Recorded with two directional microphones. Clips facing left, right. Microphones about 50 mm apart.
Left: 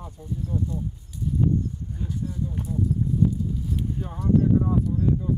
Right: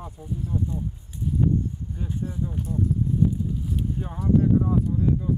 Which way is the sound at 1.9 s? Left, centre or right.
Right.